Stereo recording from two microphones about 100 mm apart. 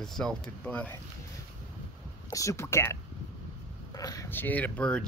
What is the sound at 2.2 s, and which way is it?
Speech, 35° left (ahead or behind).